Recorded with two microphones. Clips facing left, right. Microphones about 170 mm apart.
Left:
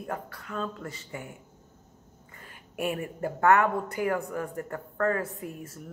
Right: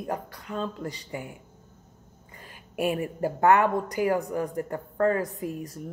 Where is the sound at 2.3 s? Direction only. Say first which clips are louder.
Right 4 dB; 15° right (ahead or behind).